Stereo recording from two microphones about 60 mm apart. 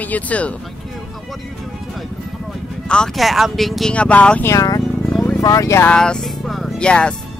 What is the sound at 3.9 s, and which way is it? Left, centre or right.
Speech, centre.